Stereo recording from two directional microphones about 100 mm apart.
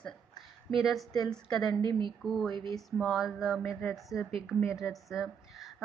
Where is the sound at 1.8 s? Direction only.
50° right (ahead or behind).